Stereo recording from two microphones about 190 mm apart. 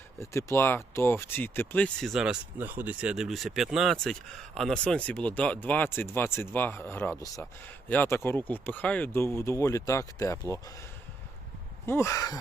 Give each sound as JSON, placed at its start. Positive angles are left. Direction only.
{"t": 0.2, "sound": "speech", "side_deg": 15}
{"t": 11.9, "sound": "speech", "side_deg": 15}